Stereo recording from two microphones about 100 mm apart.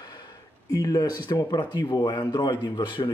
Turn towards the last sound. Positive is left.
turn(degrees=50)  # may be behind; listen again after turning